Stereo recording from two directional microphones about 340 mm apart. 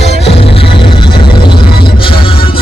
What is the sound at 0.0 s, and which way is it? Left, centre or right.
Music, centre.